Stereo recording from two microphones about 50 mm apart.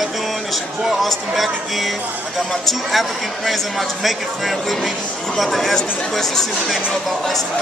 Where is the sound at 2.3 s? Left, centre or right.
Centre.